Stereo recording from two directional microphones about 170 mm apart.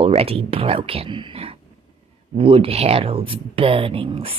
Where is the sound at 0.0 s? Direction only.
35° right (ahead or behind).